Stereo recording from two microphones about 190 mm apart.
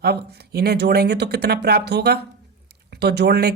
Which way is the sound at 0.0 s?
55° right (ahead or behind).